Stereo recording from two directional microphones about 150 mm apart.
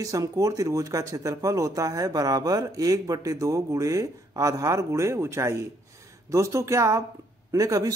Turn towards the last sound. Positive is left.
turn(degrees=-25)  # may be behind; listen again after turning